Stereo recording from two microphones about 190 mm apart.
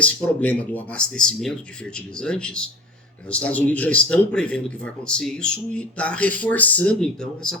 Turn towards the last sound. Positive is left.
turn(degrees=5)  # may be behind; listen again after turning